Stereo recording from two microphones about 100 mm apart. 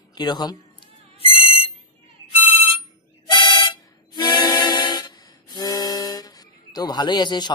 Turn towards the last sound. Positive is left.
turn(degrees=50)  # may be behind; listen again after turning